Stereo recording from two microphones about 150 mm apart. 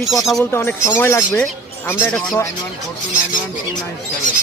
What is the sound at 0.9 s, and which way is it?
Speech, 15° left (ahead or behind).